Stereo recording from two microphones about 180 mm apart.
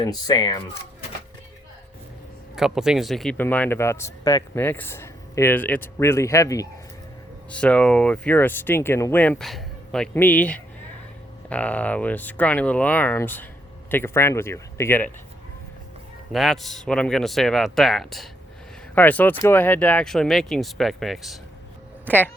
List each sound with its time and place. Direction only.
0.0 s speech: 20° left (ahead or behind)
2.6 s speech: 5° right (ahead or behind); by 6.7 s 20° left (ahead or behind)
7.5 s speech: 5° left (ahead or behind)
16.3 s speech: centre (ahead or behind)